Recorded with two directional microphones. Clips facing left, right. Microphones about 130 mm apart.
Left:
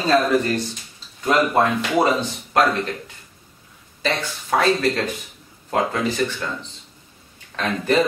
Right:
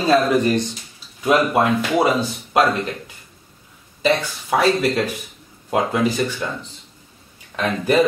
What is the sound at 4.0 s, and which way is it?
Speech, 10° right (ahead or behind).